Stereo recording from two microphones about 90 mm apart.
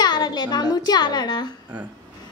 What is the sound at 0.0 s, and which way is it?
A woman's voice, 50° left (ahead or behind).